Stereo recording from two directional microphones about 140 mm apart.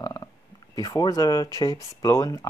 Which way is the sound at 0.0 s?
25° left (ahead or behind).